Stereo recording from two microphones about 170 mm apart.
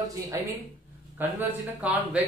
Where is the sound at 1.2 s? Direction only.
10° right (ahead or behind).